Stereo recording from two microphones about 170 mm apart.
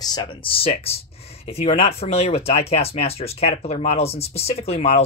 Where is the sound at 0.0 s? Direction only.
25° left (ahead or behind).